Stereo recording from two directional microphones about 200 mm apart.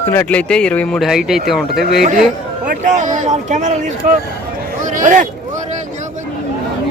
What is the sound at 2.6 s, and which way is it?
Speech, 40° right (ahead or behind).